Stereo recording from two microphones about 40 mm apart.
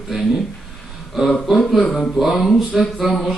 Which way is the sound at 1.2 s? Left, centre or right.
Centre.